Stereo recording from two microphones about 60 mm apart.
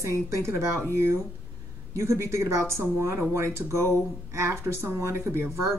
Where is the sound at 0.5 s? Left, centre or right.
Right.